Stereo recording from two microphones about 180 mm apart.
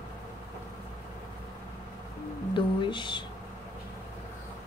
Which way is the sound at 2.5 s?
25° left (ahead or behind).